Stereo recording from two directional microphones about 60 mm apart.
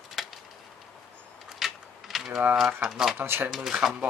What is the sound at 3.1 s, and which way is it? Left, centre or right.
Speech, right.